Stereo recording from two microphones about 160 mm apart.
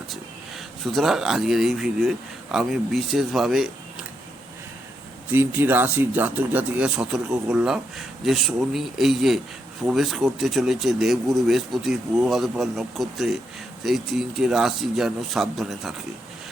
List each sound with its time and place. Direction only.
0.9 s speech: centre (ahead or behind)
5.3 s speech: 10° right (ahead or behind)